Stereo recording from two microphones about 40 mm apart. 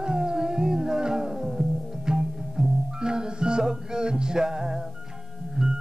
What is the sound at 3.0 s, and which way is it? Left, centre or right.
Music, centre.